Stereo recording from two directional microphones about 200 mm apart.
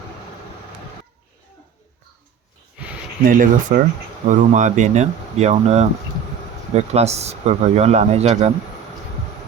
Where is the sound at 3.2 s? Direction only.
40° right (ahead or behind).